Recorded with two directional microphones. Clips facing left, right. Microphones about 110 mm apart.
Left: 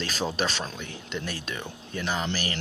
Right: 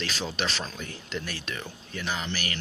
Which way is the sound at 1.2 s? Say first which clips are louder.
Left 2 dB; 25° left (ahead or behind).